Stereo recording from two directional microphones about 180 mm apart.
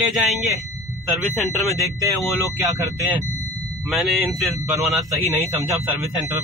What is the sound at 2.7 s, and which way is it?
Speech, 15° right (ahead or behind).